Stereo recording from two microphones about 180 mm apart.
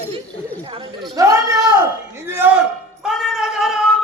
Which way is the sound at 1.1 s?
20° right (ahead or behind).